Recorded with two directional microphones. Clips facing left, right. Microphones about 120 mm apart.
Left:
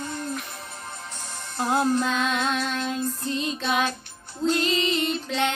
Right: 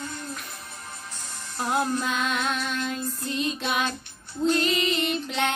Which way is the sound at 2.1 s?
25° left (ahead or behind).